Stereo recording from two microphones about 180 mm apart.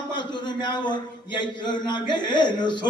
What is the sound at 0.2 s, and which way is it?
A man's voice, 25° left (ahead or behind).